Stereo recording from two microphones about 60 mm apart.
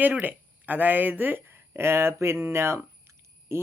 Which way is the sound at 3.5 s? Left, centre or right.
Right.